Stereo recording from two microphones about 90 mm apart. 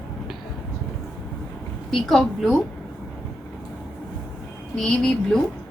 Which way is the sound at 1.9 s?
5° left (ahead or behind).